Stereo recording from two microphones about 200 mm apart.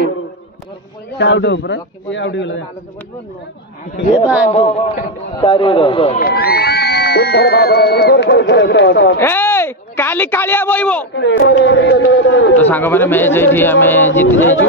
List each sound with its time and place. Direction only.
1.1 s a man's voice: 65° left (ahead or behind)
4.5 s a man's voice: 30° left (ahead or behind)
6.1 s speech: 50° left (ahead or behind)
9.2 s speech: 10° left (ahead or behind)
11.1 s a man's voice: 60° left (ahead or behind)
12.5 s speech: 10° left (ahead or behind)